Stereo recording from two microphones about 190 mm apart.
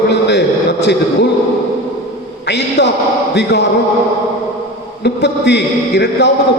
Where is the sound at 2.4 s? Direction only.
65° left (ahead or behind).